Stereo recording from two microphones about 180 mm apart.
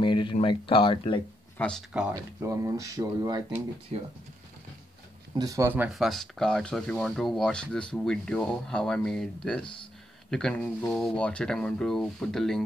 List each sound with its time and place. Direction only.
0.0 s speech: 25° left (ahead or behind)
1.6 s speech: centre (ahead or behind)
2.4 s speech: 15° right (ahead or behind)
5.3 s speech: 20° right (ahead or behind); by 12.6 s centre (ahead or behind)